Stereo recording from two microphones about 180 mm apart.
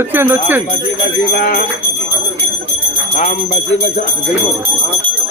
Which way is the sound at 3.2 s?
40° left (ahead or behind).